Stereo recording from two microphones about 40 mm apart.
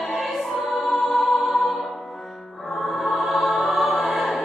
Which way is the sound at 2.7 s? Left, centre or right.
Centre.